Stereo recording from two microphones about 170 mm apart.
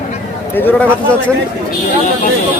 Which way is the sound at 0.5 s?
10° left (ahead or behind).